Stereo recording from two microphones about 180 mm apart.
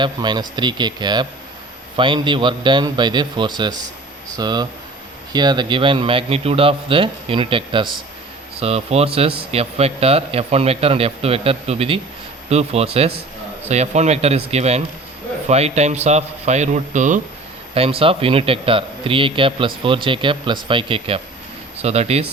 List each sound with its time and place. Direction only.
0.0 s a man's voice: 25° right (ahead or behind); by 17.2 s 45° right (ahead or behind)
17.7 s a man's voice: 30° right (ahead or behind)